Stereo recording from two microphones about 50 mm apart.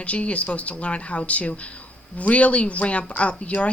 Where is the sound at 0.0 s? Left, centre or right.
Left.